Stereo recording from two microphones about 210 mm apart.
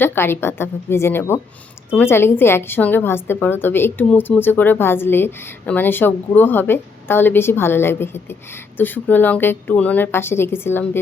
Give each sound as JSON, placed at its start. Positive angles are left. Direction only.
{"t": 0.0, "sound": "a woman's voice", "side_deg": 10}